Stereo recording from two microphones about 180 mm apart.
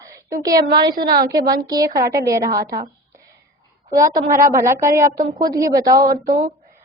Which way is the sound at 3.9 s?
20° right (ahead or behind).